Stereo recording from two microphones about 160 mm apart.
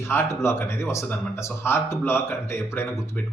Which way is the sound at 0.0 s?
15° left (ahead or behind).